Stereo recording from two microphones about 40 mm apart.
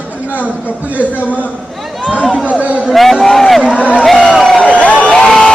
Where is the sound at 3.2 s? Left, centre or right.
Centre.